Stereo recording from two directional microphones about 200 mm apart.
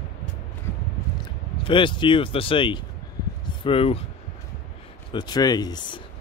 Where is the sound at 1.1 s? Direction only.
25° left (ahead or behind).